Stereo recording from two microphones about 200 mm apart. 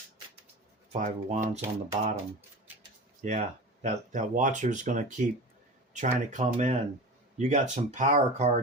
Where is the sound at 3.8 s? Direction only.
35° right (ahead or behind).